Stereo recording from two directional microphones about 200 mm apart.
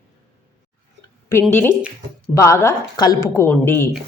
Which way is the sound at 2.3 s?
15° left (ahead or behind).